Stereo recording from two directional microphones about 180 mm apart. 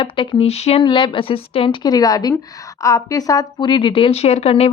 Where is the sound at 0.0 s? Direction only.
30° left (ahead or behind).